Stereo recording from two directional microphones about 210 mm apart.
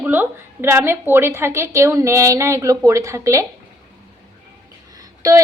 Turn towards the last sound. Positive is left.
turn(degrees=-20)  # may be behind; listen again after turning